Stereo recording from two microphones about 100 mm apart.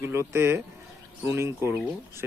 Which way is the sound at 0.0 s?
25° right (ahead or behind).